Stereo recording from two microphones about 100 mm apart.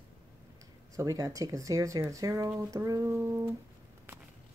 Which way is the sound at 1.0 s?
30° right (ahead or behind).